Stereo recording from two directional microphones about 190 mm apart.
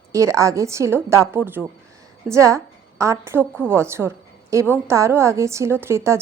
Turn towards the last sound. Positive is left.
turn(degrees=-15)  # may be behind; listen again after turning